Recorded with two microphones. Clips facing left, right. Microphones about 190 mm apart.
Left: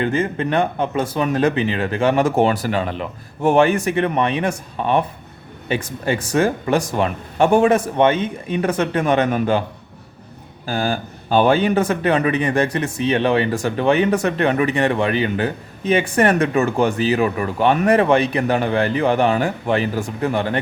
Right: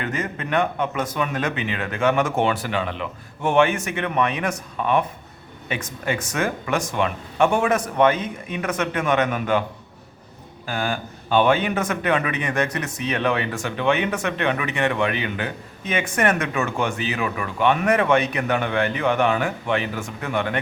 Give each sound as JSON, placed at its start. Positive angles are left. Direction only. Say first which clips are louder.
{"t": 0.0, "sound": "speech", "louder": "left 8 dB", "side_deg": 30}
{"t": 10.7, "sound": "speech", "louder": "left 4 dB", "side_deg": 35}